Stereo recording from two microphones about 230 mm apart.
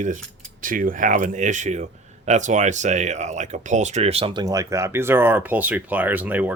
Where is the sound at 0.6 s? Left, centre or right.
Right.